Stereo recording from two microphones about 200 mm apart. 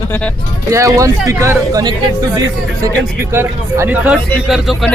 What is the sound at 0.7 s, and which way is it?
Speech, 15° right (ahead or behind).